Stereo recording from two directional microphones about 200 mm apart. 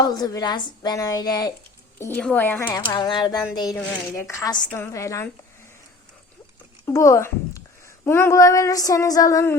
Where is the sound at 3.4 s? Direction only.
20° left (ahead or behind).